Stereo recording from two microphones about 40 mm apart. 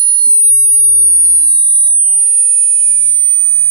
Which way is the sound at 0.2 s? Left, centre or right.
Left.